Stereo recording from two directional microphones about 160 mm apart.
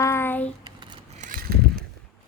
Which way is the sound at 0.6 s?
30° right (ahead or behind).